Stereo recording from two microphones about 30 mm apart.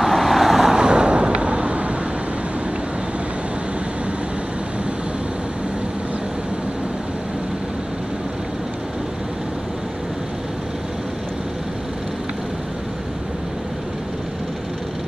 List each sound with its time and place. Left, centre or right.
0.0 s vehicle: centre
0.7 s vehicle: right